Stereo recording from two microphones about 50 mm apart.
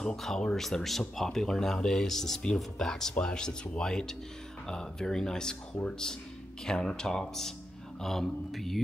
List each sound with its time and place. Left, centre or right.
0.0 s speech: centre